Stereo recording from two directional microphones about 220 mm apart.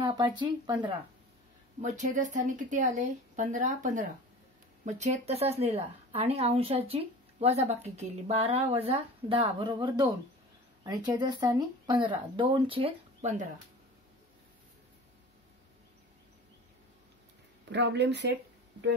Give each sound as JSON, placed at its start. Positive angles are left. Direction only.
{"t": 0.0, "sound": "a woman's voice", "side_deg": -20}
{"t": 1.8, "sound": "a woman's voice", "side_deg": -35}
{"t": 17.6, "sound": "speech", "side_deg": -50}